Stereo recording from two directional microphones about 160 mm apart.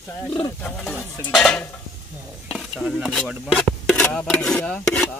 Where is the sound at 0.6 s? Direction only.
5° left (ahead or behind).